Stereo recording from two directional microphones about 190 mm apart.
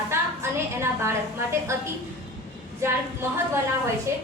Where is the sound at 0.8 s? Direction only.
15° right (ahead or behind).